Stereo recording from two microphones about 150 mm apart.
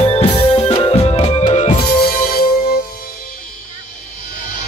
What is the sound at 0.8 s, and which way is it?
Music, 45° left (ahead or behind).